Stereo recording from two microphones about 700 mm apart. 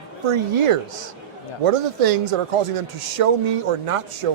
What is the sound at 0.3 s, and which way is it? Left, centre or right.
A man's voice, right.